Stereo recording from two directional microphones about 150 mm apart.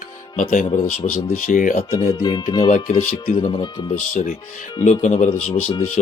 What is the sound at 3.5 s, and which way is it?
Speech, 30° left (ahead or behind).